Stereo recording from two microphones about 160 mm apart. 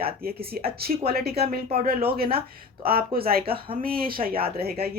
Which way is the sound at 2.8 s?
70° right (ahead or behind).